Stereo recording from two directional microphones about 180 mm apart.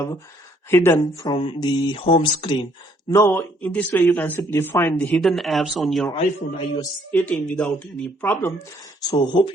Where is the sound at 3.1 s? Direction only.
15° left (ahead or behind); by 6.0 s centre (ahead or behind).